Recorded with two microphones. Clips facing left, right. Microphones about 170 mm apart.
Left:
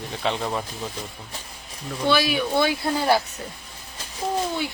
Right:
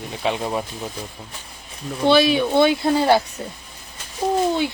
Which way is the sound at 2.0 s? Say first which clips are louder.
Right 6 dB; 25° right (ahead or behind).